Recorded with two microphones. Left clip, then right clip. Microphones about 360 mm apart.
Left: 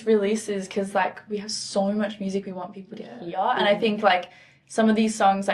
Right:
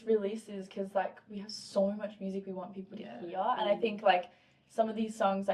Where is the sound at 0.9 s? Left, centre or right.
Left.